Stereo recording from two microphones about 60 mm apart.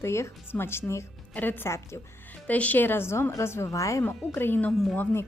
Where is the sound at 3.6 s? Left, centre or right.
Left.